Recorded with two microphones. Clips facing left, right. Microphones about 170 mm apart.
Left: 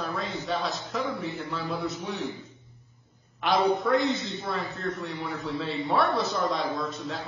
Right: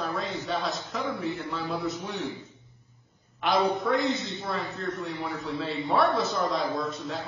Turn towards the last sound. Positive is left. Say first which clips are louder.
# right 1 dB
turn(degrees=0)  # may be behind; listen again after turning